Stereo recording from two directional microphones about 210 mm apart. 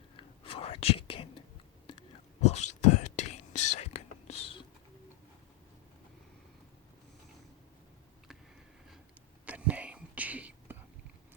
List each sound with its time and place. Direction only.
0.2 s whispering: 25° left (ahead or behind)
9.5 s whispering: 5° right (ahead or behind)